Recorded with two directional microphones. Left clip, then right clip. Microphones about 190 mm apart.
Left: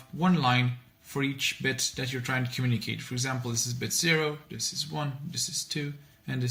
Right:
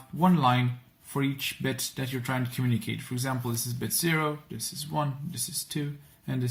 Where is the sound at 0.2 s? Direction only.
35° right (ahead or behind).